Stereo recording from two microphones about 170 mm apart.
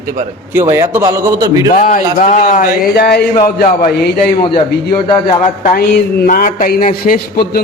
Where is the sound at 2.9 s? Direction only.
70° left (ahead or behind).